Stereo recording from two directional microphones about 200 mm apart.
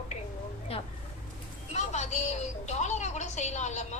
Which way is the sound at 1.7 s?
35° left (ahead or behind).